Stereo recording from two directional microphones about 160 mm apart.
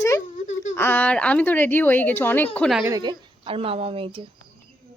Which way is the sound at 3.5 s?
35° right (ahead or behind).